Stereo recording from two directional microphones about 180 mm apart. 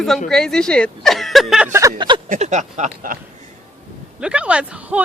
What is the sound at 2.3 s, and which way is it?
Speech, 40° right (ahead or behind).